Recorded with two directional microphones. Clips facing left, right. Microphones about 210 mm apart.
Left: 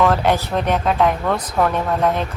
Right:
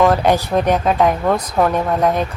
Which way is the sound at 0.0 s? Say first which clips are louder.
Right 3 dB; 15° right (ahead or behind).